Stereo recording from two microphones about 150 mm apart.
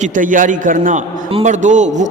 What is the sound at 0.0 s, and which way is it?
A man's voice, 60° right (ahead or behind).